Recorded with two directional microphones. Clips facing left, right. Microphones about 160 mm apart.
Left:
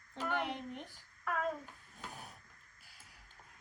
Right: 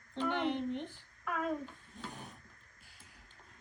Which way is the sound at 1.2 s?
5° left (ahead or behind).